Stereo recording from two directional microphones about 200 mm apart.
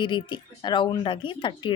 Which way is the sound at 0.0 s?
25° left (ahead or behind).